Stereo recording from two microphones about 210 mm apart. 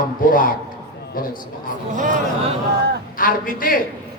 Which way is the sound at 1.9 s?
40° right (ahead or behind).